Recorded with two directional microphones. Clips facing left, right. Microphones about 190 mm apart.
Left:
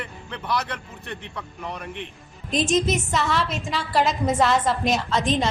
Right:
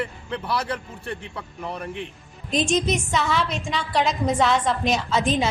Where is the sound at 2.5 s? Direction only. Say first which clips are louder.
Even; centre (ahead or behind).